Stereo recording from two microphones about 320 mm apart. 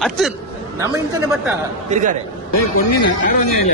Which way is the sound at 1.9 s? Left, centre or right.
Right.